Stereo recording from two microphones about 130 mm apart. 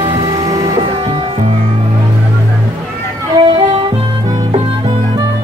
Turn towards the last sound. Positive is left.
turn(degrees=-40)  # may be behind; listen again after turning